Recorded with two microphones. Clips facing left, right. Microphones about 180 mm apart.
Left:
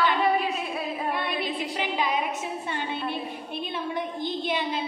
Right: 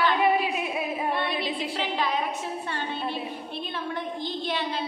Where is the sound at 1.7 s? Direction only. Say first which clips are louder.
Left 1 dB; 15° left (ahead or behind).